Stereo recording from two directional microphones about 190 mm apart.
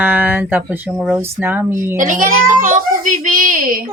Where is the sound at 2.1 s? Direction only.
45° right (ahead or behind).